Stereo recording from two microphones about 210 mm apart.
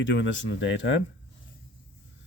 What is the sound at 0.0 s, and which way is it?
Speech, 60° left (ahead or behind).